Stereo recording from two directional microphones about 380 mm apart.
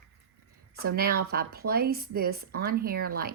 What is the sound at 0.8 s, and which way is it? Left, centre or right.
Speech, right.